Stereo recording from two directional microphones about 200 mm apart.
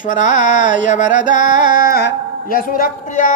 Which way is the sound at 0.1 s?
40° left (ahead or behind).